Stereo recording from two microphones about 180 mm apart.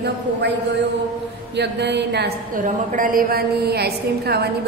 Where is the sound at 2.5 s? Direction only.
50° right (ahead or behind).